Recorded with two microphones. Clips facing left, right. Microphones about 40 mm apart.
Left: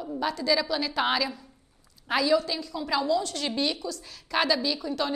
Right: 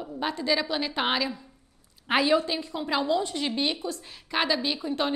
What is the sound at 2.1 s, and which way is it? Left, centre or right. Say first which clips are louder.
A woman's voice: right 1 dB; right.